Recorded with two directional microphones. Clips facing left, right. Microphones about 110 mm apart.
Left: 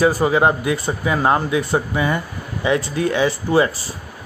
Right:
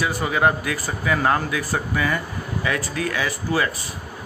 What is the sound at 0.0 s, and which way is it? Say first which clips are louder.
Speech: left 5 dB; 30° left (ahead or behind).